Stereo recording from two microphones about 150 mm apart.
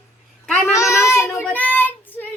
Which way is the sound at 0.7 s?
20° left (ahead or behind).